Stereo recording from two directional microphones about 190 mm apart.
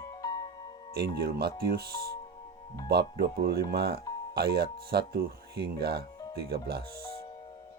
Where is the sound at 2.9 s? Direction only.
55° right (ahead or behind).